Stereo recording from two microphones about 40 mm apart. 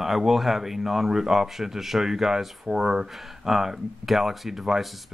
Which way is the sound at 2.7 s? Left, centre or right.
Right.